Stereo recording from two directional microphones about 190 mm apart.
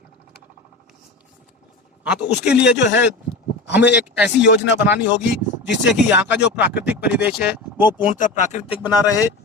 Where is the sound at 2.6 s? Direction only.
65° left (ahead or behind).